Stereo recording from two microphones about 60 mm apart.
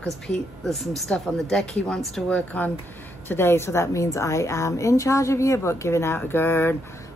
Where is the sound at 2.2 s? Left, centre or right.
Left.